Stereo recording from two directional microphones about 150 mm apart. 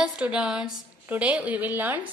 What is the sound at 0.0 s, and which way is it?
A woman's voice, 5° right (ahead or behind).